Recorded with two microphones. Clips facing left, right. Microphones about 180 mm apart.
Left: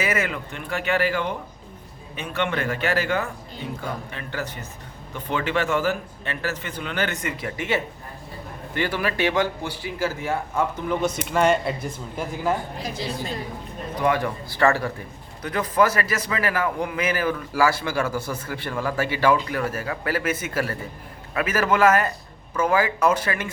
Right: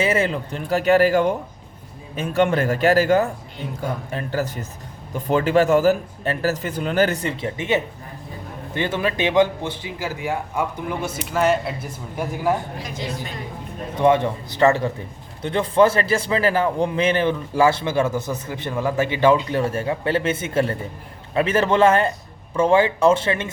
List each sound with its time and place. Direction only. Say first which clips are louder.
0.0 s a man's voice: right 5 dB; 30° right (ahead or behind); by 11.9 s 5° right (ahead or behind)
12.9 s a woman's voice: even; 35° left (ahead or behind)
14.0 s a man's voice: right 6 dB; 25° right (ahead or behind)